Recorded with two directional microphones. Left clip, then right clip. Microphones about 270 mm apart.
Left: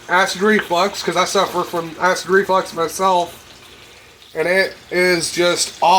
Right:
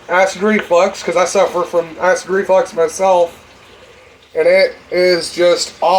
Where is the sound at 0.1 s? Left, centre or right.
Left.